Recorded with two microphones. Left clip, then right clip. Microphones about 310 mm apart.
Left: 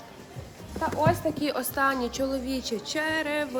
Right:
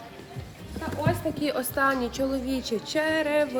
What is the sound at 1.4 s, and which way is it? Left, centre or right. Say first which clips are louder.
A woman's voice: right 1 dB; centre.